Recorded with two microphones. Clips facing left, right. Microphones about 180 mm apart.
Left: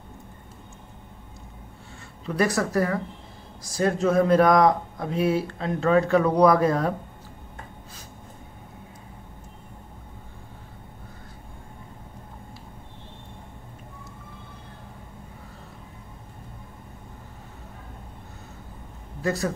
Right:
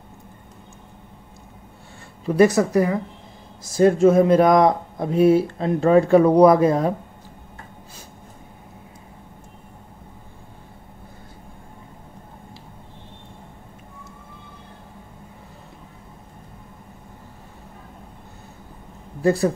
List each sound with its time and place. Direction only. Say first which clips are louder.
2.3 s speech: right 7 dB; 20° right (ahead or behind)
19.2 s speech: right 8 dB; 30° right (ahead or behind)